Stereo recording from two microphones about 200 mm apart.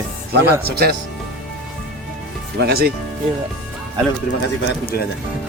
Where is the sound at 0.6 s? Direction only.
50° right (ahead or behind).